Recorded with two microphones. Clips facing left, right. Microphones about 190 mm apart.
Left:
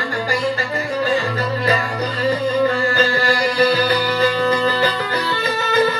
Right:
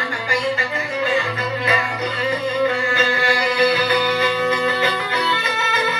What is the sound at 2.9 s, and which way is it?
Music, 40° left (ahead or behind).